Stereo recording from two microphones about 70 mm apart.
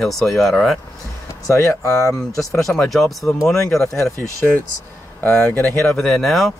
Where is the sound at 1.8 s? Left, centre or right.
Left.